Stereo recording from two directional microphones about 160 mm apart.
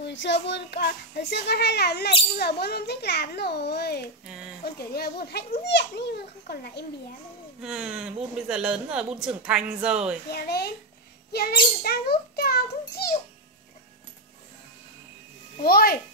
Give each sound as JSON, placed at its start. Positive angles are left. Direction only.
{"t": 0.0, "sound": "a child's voice", "side_deg": 90}
{"t": 4.6, "sound": "a child's voice", "side_deg": 75}
{"t": 7.6, "sound": "a woman's voice", "side_deg": -5}
{"t": 10.3, "sound": "a child's voice", "side_deg": 80}
{"t": 11.3, "sound": "a child's voice", "side_deg": 70}
{"t": 15.6, "sound": "a child's voice", "side_deg": 75}